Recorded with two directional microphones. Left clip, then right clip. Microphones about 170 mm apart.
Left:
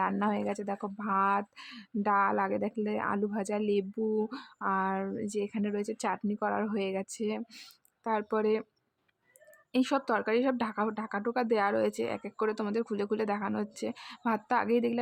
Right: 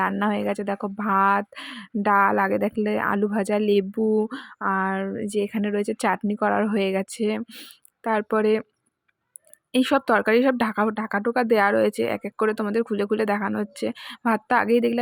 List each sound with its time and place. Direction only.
0.0 s a woman's voice: 25° right (ahead or behind)
9.7 s speech: 30° right (ahead or behind)